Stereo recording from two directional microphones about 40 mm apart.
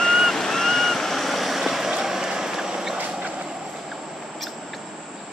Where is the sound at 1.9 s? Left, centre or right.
Centre.